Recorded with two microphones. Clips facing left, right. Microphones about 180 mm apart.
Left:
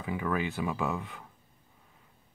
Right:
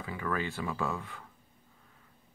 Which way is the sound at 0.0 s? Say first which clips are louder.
Left 3 dB; 15° left (ahead or behind).